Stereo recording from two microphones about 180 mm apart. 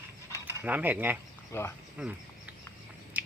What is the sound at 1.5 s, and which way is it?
Speech, 15° left (ahead or behind).